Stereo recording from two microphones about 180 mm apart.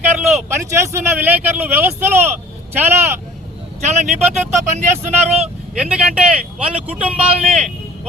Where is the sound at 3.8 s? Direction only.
40° right (ahead or behind).